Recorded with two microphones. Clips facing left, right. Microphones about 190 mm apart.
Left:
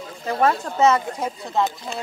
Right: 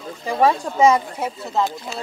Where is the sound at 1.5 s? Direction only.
Centre (ahead or behind).